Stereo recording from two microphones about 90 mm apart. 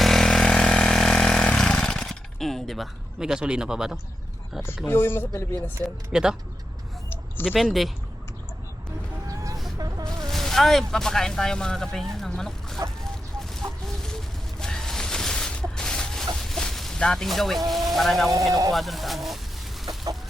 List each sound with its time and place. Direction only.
0.0 s vehicle: 5° left (ahead or behind)
4.5 s speech: 5° right (ahead or behind)
4.9 s speech: 25° left (ahead or behind)
6.1 s speech: 5° right (ahead or behind)
7.4 s speech: centre (ahead or behind)
9.2 s a sound: 40° right (ahead or behind)
10.2 s speech: 5° left (ahead or behind)
13.1 s chicken: 5° left (ahead or behind)
14.6 s a sound: 5° left (ahead or behind)
17.7 s speech: centre (ahead or behind)
18.3 s speech: 40° right (ahead or behind)
18.7 s speech: centre (ahead or behind)